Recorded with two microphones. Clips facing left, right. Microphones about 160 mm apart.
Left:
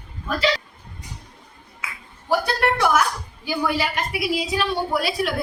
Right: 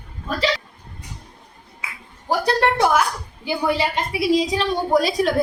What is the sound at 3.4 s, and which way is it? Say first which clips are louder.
A woman's voice: right 2 dB; 25° right (ahead or behind).